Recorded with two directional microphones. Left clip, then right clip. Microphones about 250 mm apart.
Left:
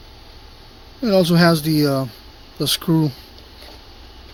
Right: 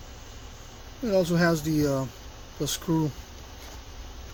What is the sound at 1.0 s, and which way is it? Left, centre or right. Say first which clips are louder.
Speech: left 8 dB; left.